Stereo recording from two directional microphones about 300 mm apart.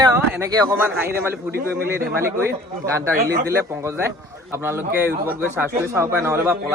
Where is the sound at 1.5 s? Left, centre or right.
Right.